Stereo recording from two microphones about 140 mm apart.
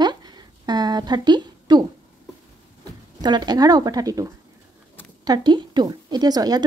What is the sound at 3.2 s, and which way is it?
A woman's voice, 30° right (ahead or behind).